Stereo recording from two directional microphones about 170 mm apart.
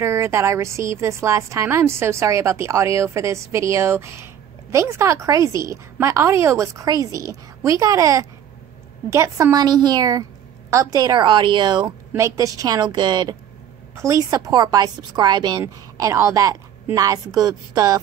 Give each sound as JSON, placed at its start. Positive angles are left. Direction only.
{"t": 0.0, "sound": "a woman's voice", "side_deg": -15}